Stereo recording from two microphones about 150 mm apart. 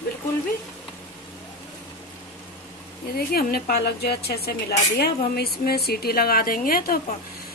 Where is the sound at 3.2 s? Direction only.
85° left.